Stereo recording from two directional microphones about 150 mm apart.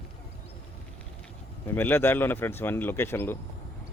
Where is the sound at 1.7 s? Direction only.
15° left (ahead or behind).